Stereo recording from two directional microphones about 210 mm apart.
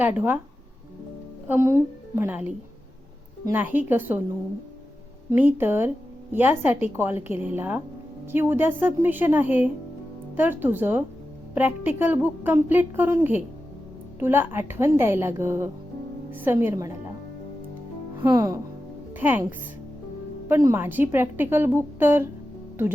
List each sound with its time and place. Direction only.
0.0 s a woman's voice: 10° right (ahead or behind)
1.5 s a woman's voice: 10° right (ahead or behind)
5.3 s a woman's voice: 10° right (ahead or behind)
18.3 s a woman's voice: 15° right (ahead or behind)